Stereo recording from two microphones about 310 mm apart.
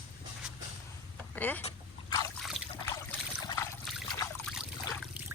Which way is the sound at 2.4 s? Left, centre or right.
Centre.